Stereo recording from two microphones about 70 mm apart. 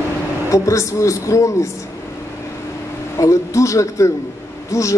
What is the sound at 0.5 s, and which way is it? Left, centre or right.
Speech, left.